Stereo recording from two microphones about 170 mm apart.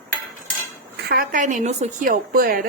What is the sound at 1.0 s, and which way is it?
Speech, 65° right (ahead or behind).